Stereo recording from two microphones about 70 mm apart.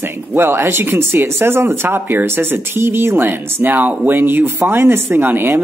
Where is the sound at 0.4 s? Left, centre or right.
Right.